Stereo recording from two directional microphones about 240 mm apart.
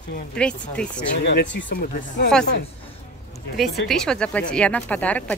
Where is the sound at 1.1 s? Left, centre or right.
Left.